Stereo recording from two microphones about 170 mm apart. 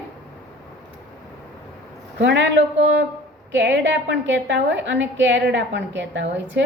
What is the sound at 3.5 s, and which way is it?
A woman's voice, 90° right.